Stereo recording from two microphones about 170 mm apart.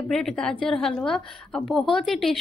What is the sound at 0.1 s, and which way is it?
A woman's voice, 5° left (ahead or behind).